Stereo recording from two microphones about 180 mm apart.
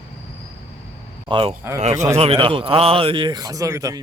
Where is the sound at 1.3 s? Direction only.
30° right (ahead or behind).